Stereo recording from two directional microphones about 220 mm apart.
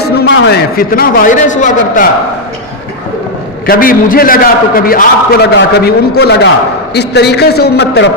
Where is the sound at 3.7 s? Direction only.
40° left (ahead or behind).